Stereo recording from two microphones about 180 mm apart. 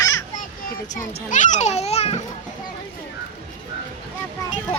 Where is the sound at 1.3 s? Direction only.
45° left (ahead or behind).